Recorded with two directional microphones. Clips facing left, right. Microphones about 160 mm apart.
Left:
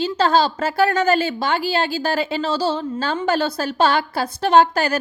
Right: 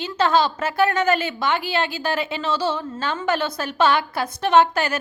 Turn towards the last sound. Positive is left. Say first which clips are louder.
# left 2 dB
turn(degrees=35)  # may be behind; listen again after turning